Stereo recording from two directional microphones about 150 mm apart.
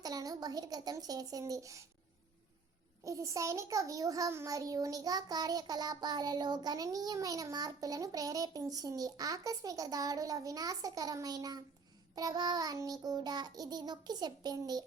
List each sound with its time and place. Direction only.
0.0 s a child's voice: 25° right (ahead or behind)
3.0 s a child's voice: 20° right (ahead or behind)